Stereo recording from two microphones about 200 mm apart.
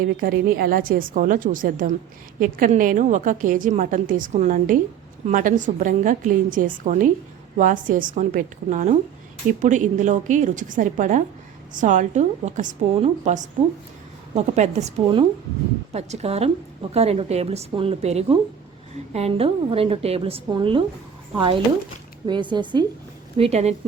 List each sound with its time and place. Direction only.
0.0 s a woman's voice: 45° right (ahead or behind); by 22.9 s 20° right (ahead or behind)
23.4 s a woman's voice: 35° right (ahead or behind)